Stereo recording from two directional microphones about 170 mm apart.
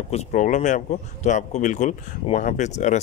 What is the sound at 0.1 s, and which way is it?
A man's voice, 45° left (ahead or behind).